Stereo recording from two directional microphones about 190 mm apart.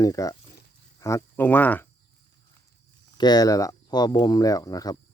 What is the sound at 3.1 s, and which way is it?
Speech, 20° left (ahead or behind).